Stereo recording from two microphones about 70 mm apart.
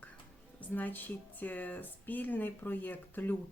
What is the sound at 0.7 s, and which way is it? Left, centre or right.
Speech, left.